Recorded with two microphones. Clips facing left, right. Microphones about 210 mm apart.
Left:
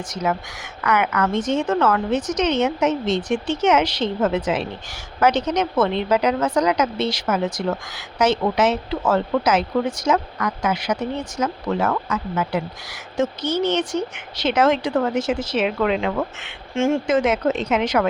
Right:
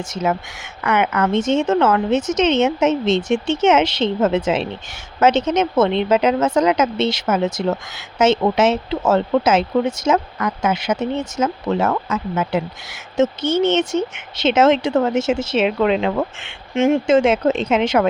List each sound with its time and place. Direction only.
0.1 s speech: 25° right (ahead or behind)